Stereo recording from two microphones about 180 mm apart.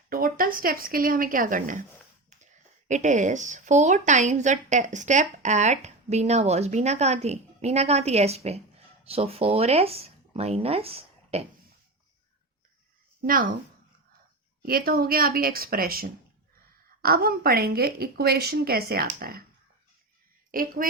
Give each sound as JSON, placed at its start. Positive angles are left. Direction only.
{"t": 0.1, "sound": "speech", "side_deg": -50}
{"t": 13.2, "sound": "speech", "side_deg": -50}
{"t": 14.6, "sound": "a woman's voice", "side_deg": -55}
{"t": 20.5, "sound": "speech", "side_deg": -50}